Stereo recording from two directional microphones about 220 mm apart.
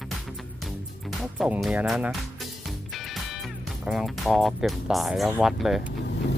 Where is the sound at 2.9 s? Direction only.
Centre (ahead or behind).